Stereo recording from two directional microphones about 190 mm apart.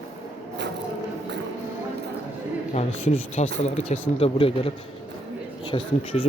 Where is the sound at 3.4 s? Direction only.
35° left (ahead or behind).